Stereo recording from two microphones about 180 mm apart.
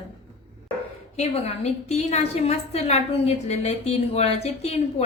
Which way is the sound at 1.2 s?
35° left (ahead or behind).